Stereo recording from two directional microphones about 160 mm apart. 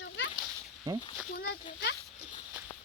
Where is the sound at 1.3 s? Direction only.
80° left.